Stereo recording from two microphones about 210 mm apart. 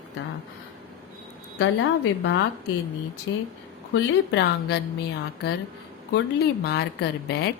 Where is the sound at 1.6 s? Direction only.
65° left (ahead or behind).